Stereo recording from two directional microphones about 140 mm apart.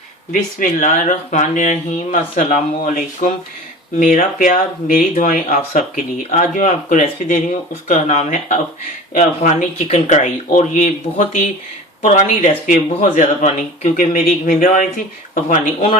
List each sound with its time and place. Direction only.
0.8 s speech: 70° left (ahead or behind)
4.0 s speech: 75° left (ahead or behind)
15.4 s speech: 60° left (ahead or behind)